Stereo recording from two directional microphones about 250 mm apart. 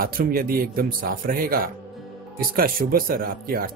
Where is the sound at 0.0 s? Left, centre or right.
Right.